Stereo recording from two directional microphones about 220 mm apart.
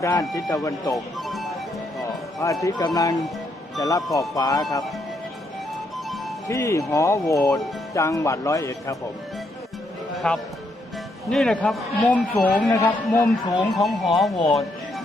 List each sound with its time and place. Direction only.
0.0 s speech: 15° left (ahead or behind)
1.3 s music: centre (ahead or behind)
2.4 s speech: 15° left (ahead or behind)
6.5 s speech: 15° left (ahead or behind)
10.2 s a man's voice: centre (ahead or behind)
13.7 s a man's voice: centre (ahead or behind)